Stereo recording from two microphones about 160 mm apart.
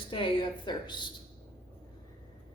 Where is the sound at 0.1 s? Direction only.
30° left (ahead or behind).